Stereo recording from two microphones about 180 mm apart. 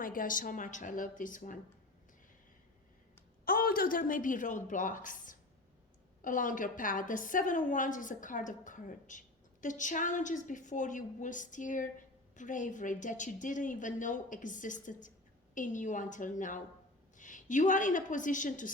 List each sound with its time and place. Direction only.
0.0 s a woman's voice: 50° left (ahead or behind)
3.4 s a woman's voice: 50° left (ahead or behind)